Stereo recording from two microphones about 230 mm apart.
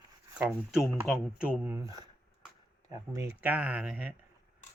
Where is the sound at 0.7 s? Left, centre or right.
Centre.